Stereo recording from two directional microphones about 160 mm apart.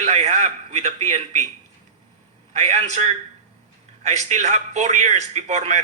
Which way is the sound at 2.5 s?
45° right (ahead or behind).